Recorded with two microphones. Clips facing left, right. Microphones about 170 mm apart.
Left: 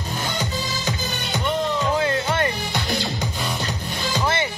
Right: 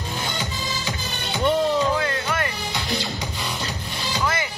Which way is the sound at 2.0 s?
25° left (ahead or behind).